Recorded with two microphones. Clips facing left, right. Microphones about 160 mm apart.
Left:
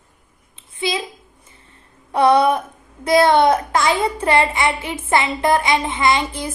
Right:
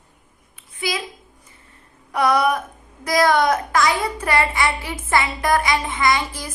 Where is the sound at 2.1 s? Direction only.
30° left (ahead or behind).